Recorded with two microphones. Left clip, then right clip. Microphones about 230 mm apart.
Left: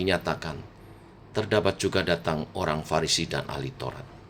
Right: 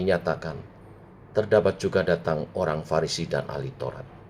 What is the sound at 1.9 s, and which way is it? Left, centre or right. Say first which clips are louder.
Speech: right 5 dB; left.